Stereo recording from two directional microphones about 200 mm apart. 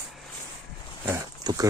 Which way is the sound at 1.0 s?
15° right (ahead or behind).